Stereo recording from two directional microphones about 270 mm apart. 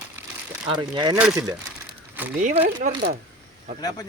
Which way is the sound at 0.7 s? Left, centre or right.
Centre.